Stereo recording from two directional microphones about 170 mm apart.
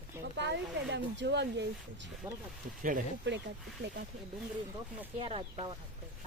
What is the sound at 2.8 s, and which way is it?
Speech, 50° right (ahead or behind).